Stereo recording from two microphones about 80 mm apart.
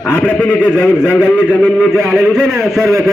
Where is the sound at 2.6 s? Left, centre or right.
Centre.